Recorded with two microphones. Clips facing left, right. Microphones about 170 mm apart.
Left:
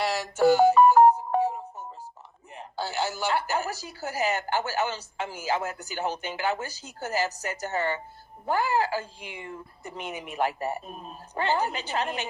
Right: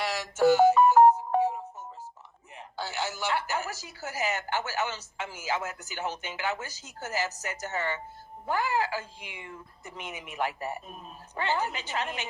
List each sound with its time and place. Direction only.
0.0 s music: 35° left (ahead or behind)
2.6 s speech: 35° left (ahead or behind)